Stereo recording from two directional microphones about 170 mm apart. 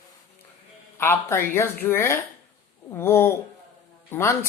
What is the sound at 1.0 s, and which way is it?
A woman's voice, 15° left (ahead or behind).